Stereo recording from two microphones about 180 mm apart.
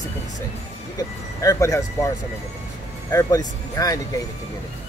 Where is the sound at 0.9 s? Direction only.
20° left (ahead or behind).